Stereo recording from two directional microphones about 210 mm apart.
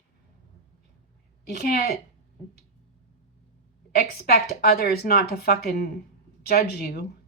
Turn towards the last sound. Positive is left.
turn(degrees=45)  # may be behind; listen again after turning